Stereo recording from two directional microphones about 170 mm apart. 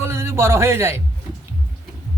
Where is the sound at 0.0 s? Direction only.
15° right (ahead or behind).